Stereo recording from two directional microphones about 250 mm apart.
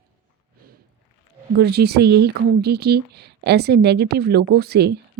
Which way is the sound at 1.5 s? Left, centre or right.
Right.